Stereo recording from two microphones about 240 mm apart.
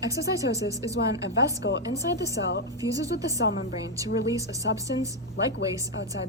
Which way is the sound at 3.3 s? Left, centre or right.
Left.